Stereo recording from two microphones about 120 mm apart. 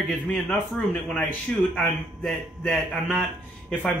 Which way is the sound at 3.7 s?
15° left (ahead or behind).